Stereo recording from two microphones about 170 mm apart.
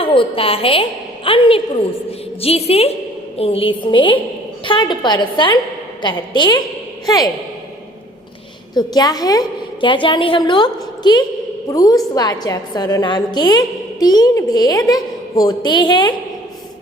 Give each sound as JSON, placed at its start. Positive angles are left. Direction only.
{"t": 0.0, "sound": "a woman's voice", "side_deg": 30}
{"t": 8.7, "sound": "a woman's voice", "side_deg": 25}